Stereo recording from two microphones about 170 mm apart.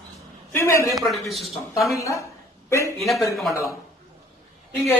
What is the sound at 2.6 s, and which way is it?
Speech, 15° left (ahead or behind).